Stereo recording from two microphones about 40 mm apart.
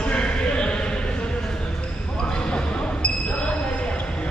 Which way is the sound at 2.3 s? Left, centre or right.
Left.